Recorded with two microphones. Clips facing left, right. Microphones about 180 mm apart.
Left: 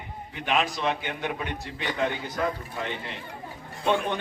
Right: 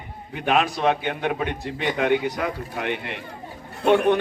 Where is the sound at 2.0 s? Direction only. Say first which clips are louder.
Right 5 dB; 70° right (ahead or behind).